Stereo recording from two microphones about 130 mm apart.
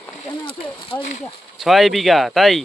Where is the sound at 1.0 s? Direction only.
65° left (ahead or behind).